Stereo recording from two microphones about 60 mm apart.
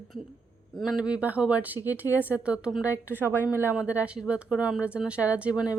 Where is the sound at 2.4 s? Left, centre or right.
Centre.